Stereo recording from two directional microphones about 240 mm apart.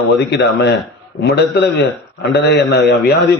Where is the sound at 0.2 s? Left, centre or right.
Left.